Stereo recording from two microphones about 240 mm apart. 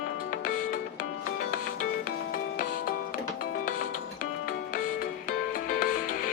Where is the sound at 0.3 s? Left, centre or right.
Left.